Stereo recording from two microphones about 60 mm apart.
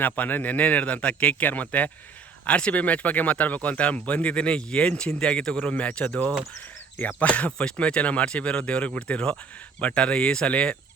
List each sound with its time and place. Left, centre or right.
0.0 s speech: left